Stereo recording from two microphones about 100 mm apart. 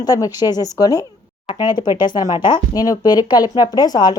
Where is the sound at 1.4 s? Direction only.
50° left (ahead or behind).